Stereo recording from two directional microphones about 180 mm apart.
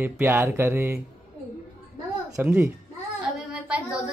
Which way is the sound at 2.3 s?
10° right (ahead or behind).